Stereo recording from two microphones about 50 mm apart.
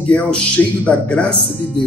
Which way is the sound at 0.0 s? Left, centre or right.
Left.